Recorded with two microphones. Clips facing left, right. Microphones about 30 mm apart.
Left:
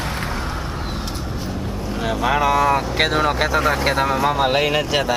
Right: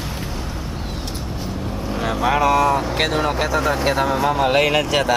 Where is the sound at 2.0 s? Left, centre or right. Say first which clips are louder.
Right 1 dB; centre.